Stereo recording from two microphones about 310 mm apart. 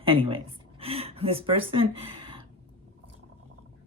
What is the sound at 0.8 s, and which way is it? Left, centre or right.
Speech, centre.